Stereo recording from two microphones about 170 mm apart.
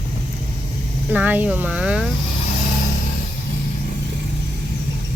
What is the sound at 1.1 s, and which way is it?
Speech, 10° right (ahead or behind).